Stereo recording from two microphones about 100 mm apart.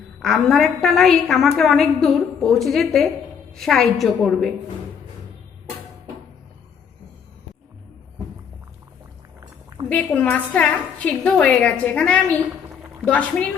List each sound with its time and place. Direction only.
0.2 s a woman's voice: centre (ahead or behind)
9.8 s a sound: 55° right (ahead or behind)
10.2 s a woman's voice: 15° left (ahead or behind)